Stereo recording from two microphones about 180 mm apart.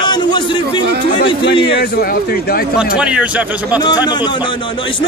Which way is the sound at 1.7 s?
55° left (ahead or behind).